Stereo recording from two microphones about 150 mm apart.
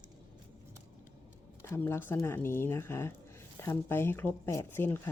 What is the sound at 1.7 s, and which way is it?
Speech, 15° left (ahead or behind).